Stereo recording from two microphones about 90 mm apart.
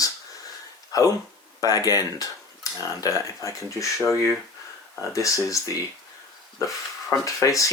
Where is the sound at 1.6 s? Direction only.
40° left (ahead or behind).